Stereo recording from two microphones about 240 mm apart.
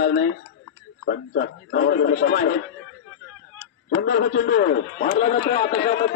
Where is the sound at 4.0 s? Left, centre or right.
Left.